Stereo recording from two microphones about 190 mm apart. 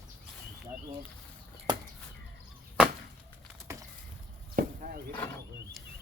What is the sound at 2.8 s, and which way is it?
Chop, 5° right (ahead or behind).